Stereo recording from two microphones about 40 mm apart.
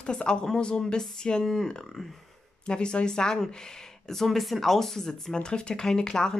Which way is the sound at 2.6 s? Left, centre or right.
Left.